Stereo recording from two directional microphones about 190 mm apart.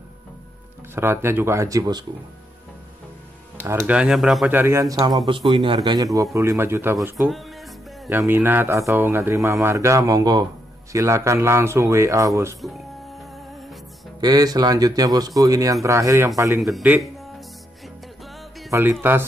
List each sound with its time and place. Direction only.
0.9 s speech: 10° right (ahead or behind)
3.6 s speech: 10° right (ahead or behind)
4.6 s speech: 15° right (ahead or behind)
7.2 s music: centre (ahead or behind)
8.1 s speech: 10° right (ahead or behind)
12.6 s speech: centre (ahead or behind)
13.2 s music: centre (ahead or behind)
14.2 s speech: 20° right (ahead or behind)
16.6 s speech: 5° right (ahead or behind)
17.8 s music: centre (ahead or behind)
18.7 s speech: 10° right (ahead or behind)